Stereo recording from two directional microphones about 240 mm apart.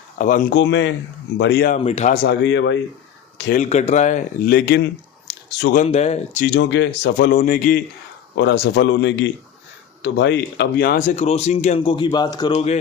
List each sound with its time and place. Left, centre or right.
0.2 s speech: left
1.7 s speech: left
2.2 s speech: left
3.3 s a sound: left
3.6 s speech: left
5.8 s speech: left
6.5 s speech: left